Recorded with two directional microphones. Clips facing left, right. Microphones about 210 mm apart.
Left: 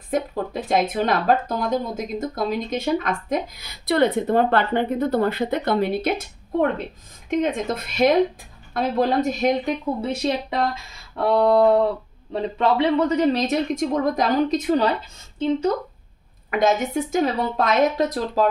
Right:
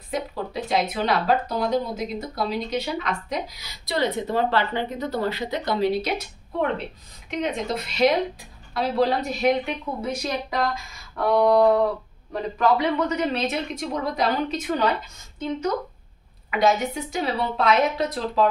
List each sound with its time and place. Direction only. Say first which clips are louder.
0.1 s speech: left 4 dB; 50° left (ahead or behind)
7.2 s speech: left 4 dB; 50° left (ahead or behind)
10.0 s a woman's voice: left 2 dB; 25° left (ahead or behind); by 14.6 s 45° left (ahead or behind)
15.3 s speech: left 6 dB; 30° left (ahead or behind)
16.4 s speech: left 1 dB; 50° left (ahead or behind)